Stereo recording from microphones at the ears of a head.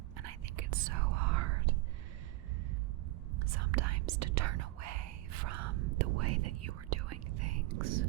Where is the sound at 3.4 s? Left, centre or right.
Right.